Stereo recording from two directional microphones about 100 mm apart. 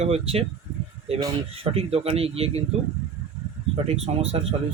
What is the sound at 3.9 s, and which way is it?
Speech, 90° right.